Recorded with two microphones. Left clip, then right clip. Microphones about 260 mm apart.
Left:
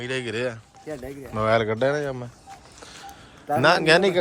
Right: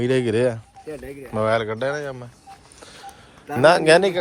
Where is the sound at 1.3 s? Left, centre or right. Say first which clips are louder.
Even; centre.